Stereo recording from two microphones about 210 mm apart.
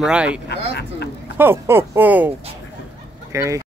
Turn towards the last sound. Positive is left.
turn(degrees=-15)  # may be behind; listen again after turning